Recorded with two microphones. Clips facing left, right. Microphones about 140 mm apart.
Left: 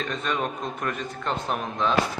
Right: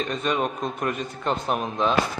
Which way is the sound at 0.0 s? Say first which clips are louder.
Right 3 dB; 20° right (ahead or behind).